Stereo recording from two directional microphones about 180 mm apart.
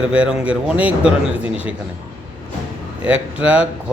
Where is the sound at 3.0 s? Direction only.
5° right (ahead or behind).